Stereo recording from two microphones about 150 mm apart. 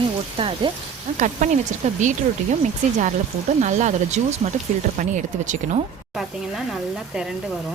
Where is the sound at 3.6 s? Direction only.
50° right (ahead or behind).